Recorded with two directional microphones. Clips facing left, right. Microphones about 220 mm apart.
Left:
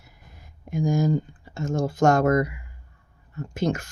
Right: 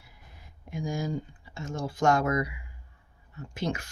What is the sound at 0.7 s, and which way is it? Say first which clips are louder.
Speech: left 9 dB; 45° left (ahead or behind).